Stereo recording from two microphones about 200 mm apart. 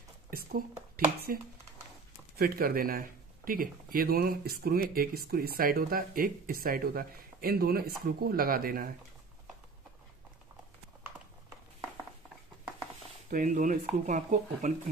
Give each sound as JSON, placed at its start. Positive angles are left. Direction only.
{"t": 0.9, "sound": "speech", "side_deg": -45}
{"t": 13.3, "sound": "speech", "side_deg": -40}